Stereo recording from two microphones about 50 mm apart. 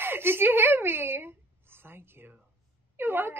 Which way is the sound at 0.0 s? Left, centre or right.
Right.